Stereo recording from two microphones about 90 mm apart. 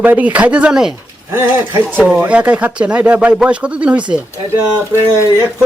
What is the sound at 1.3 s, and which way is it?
Speech, 25° right (ahead or behind).